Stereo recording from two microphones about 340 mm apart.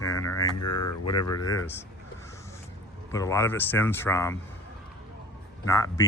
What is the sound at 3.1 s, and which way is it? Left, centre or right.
Speech, centre.